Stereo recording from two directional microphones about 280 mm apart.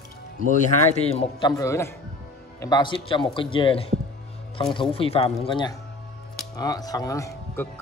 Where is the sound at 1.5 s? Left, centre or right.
Centre.